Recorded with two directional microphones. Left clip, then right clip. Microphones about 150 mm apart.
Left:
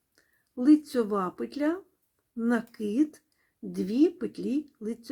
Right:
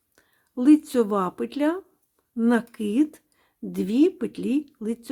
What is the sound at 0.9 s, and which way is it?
Speech, 30° right (ahead or behind).